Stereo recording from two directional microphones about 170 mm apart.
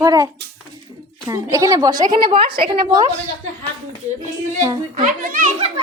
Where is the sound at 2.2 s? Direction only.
30° right (ahead or behind).